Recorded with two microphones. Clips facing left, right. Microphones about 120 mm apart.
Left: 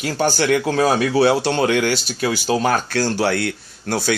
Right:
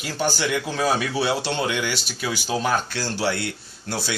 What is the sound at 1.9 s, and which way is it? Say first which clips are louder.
Speech: left 7 dB; 45° left (ahead or behind).